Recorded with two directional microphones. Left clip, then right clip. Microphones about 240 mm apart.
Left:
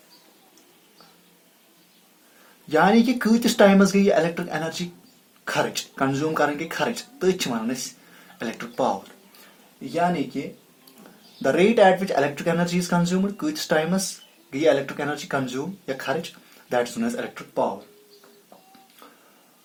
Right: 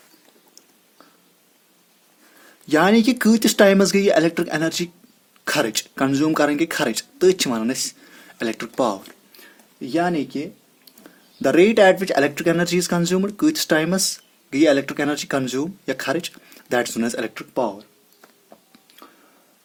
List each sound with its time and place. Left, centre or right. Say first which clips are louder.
2.6 s speech: right 2 dB; right
11.4 s speech: right 3 dB; right